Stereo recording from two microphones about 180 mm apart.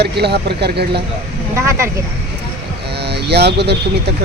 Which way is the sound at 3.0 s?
65° right (ahead or behind).